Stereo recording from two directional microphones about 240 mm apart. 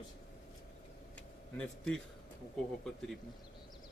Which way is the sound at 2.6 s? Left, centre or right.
Centre.